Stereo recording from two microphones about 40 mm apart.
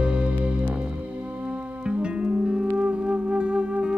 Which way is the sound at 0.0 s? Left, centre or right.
Right.